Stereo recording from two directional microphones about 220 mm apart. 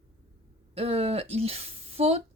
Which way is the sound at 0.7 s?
25° right (ahead or behind).